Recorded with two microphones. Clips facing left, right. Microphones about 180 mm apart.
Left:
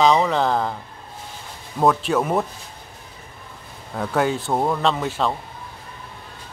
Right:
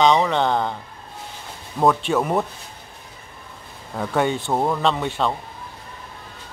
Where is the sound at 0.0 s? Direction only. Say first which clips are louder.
Even; centre (ahead or behind).